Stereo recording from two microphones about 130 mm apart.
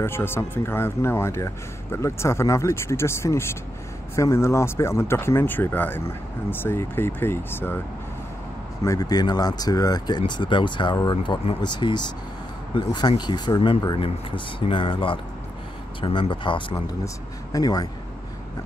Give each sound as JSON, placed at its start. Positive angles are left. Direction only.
{"t": 0.0, "sound": "speech", "side_deg": 20}
{"t": 8.8, "sound": "speech", "side_deg": 30}
{"t": 17.0, "sound": "speech", "side_deg": 25}